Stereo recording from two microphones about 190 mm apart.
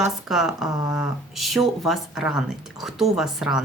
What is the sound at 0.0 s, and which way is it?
A woman's voice, centre (ahead or behind).